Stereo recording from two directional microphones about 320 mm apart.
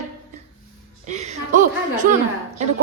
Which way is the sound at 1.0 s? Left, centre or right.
Right.